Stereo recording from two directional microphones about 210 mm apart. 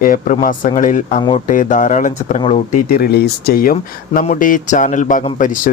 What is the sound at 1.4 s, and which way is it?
Speech, 40° left (ahead or behind).